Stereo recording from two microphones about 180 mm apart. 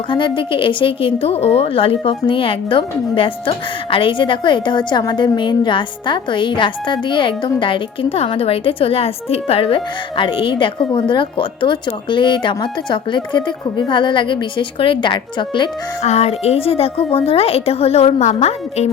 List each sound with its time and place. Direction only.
0.1 s a woman's voice: 25° left (ahead or behind)